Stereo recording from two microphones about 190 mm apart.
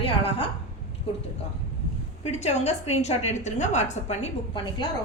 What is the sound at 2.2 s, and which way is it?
A woman's voice, 35° left (ahead or behind).